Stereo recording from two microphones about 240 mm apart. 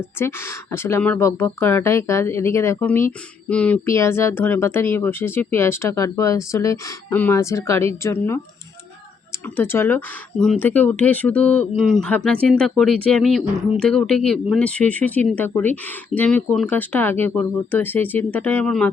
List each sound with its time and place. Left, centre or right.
0.2 s speech: centre
9.6 s speech: centre